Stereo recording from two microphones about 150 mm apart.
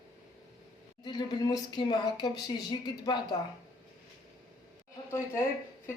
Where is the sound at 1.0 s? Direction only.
30° left (ahead or behind).